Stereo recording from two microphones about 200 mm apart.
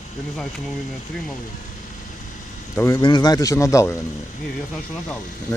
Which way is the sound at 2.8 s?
15° left (ahead or behind).